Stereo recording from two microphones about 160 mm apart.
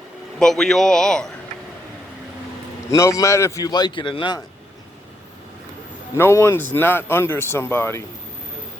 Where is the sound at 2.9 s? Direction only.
20° left (ahead or behind).